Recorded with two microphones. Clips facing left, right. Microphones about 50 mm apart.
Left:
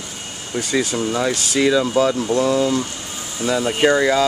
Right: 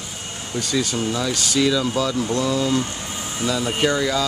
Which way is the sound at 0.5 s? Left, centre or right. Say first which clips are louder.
Left 3 dB; left.